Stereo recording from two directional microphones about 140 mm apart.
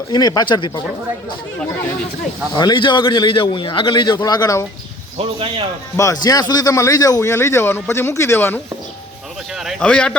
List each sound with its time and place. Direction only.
0.1 s a man's voice: 30° left (ahead or behind)
2.6 s a man's voice: 30° left (ahead or behind)
5.1 s speech: 40° right (ahead or behind)
6.2 s a man's voice: 30° left (ahead or behind)
9.6 s speech: 5° left (ahead or behind)